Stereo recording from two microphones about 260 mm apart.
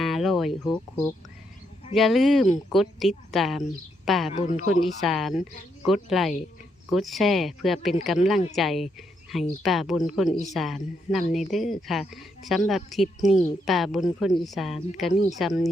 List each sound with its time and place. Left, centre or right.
0.0 s a sound: centre
1.9 s speech: centre
4.3 s speech: left
4.9 s speech: centre